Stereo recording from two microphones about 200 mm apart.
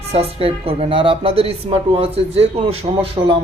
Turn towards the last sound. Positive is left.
turn(degrees=-30)  # may be behind; listen again after turning